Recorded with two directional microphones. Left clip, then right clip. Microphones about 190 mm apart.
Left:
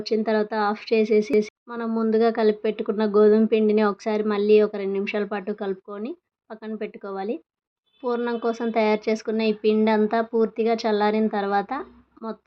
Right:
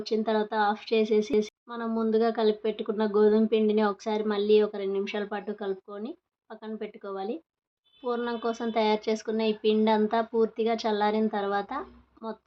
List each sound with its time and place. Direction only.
0.0 s speech: 25° left (ahead or behind)